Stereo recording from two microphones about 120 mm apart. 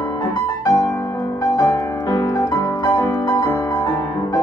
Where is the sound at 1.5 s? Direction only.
30° left (ahead or behind).